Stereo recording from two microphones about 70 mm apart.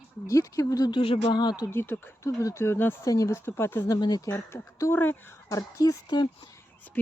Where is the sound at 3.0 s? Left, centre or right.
Left.